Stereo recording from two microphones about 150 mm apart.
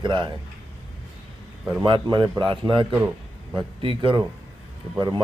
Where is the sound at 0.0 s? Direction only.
30° right (ahead or behind).